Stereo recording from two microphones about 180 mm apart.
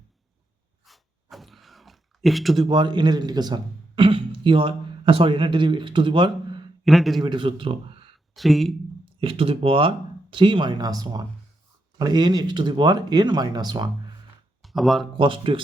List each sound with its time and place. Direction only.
0.9 s a sound: centre (ahead or behind)
2.6 s a man's voice: 25° right (ahead or behind)
6.8 s a man's voice: centre (ahead or behind)
7.3 s speech: 30° right (ahead or behind)
8.4 s a man's voice: centre (ahead or behind)
9.2 s speech: 30° right (ahead or behind)
14.6 s a sound: centre (ahead or behind)
15.2 s speech: 30° right (ahead or behind)